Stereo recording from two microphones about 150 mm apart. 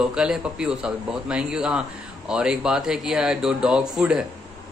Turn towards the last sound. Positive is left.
turn(degrees=-5)  # may be behind; listen again after turning